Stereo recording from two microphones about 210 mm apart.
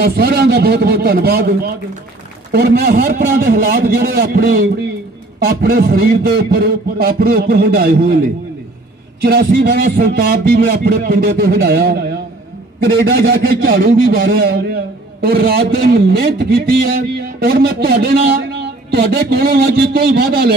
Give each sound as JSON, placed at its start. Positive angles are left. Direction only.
{"t": 0.0, "sound": "a man's voice", "side_deg": -50}
{"t": 9.2, "sound": "a man's voice", "side_deg": -50}